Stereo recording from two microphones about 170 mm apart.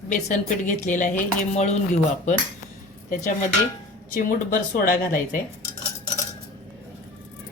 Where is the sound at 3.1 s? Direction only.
50° left (ahead or behind).